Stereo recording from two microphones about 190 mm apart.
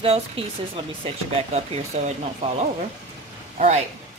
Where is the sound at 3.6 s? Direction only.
35° right (ahead or behind).